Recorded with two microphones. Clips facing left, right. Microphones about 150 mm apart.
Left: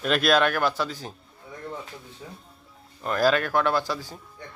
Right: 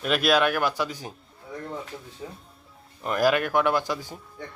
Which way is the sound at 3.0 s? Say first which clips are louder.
Even; 15° right (ahead or behind).